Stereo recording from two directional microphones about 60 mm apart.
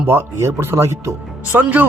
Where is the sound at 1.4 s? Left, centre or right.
Right.